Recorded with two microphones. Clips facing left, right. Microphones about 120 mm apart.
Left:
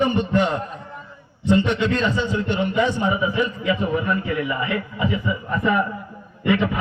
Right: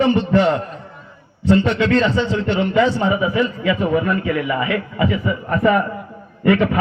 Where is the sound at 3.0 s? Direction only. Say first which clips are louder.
Right 3 dB; 65° right (ahead or behind).